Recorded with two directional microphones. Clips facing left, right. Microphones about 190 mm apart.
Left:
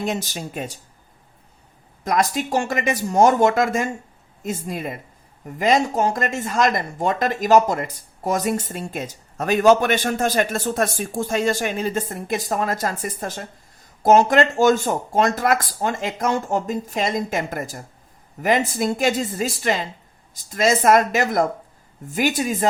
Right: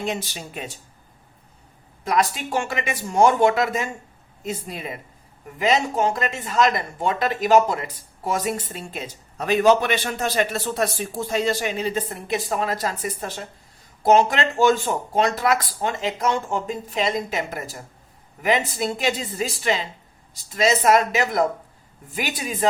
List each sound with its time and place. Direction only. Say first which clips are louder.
0.0 s speech: left 2 dB; 45° left (ahead or behind)
2.0 s speech: left 2 dB; 45° left (ahead or behind)